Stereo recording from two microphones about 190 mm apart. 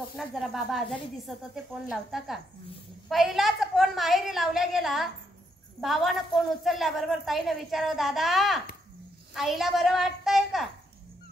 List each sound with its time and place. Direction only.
0.1 s a woman's voice: centre (ahead or behind)